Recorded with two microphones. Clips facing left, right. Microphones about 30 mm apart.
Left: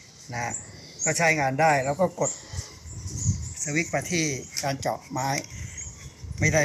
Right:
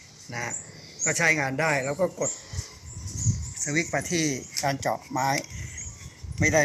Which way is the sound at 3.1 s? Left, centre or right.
Right.